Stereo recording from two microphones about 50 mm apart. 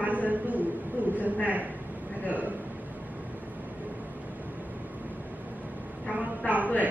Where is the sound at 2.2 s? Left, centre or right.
Right.